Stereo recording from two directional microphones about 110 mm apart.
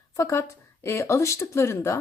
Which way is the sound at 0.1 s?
25° left (ahead or behind).